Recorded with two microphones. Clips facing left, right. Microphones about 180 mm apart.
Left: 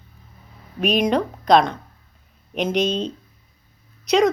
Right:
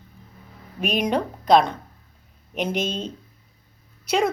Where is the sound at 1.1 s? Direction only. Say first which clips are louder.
Right 1 dB; 5° right (ahead or behind).